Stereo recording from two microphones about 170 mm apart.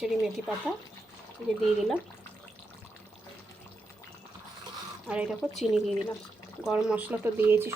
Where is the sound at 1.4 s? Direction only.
5° left (ahead or behind).